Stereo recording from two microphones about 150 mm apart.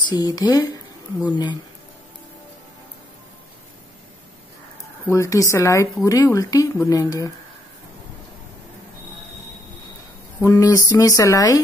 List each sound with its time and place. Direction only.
0.1 s speech: 25° left (ahead or behind)
5.0 s speech: 20° left (ahead or behind)
10.4 s speech: 20° left (ahead or behind)